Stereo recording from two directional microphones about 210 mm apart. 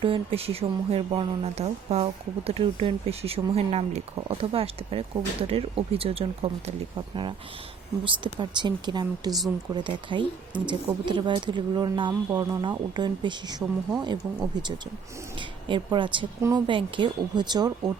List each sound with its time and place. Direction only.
0.0 s speech: 25° right (ahead or behind)
8.0 s speech: 25° right (ahead or behind)